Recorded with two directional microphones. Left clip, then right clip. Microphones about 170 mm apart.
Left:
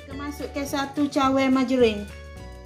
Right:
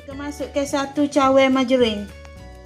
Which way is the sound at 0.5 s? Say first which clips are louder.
Right 6 dB; 25° right (ahead or behind).